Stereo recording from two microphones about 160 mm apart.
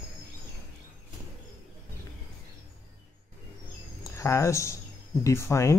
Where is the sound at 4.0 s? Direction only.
20° left (ahead or behind).